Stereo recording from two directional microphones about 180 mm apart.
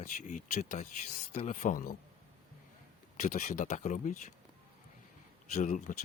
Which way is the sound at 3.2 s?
40° left (ahead or behind).